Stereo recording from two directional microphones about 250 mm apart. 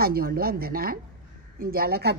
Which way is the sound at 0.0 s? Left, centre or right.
Right.